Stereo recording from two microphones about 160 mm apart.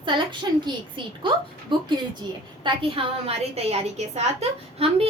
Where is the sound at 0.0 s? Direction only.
30° right (ahead or behind).